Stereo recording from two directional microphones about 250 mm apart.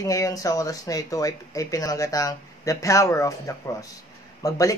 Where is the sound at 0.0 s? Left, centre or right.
Centre.